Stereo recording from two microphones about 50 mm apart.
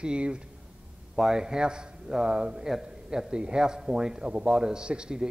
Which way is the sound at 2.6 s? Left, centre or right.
Centre.